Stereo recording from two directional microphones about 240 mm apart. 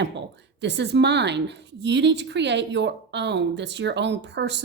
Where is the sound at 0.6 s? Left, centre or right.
Right.